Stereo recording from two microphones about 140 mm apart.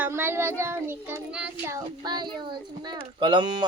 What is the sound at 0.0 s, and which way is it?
Speech, 15° right (ahead or behind).